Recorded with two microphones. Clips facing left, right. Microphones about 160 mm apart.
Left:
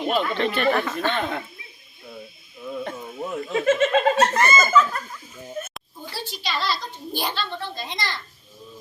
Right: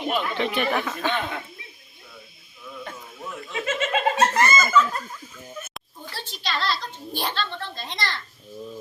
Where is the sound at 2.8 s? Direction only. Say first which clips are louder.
Left 6 dB; 35° left (ahead or behind).